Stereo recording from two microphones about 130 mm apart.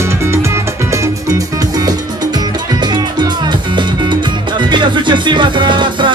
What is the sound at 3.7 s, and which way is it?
Music, 35° right (ahead or behind).